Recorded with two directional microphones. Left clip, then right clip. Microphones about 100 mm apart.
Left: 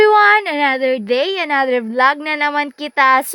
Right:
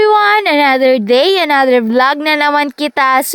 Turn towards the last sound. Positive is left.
turn(degrees=-40)  # may be behind; listen again after turning